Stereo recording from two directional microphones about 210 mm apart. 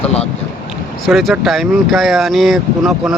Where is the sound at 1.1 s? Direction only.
Centre (ahead or behind).